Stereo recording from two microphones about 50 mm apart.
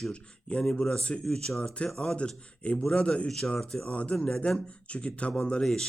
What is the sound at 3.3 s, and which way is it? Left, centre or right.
Speech, centre.